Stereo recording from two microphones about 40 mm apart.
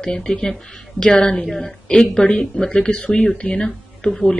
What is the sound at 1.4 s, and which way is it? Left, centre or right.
Speech, centre.